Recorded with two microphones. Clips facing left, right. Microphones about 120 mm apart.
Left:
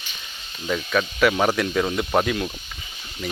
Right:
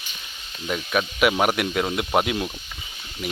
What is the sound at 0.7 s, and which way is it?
Speech, 10° right (ahead or behind).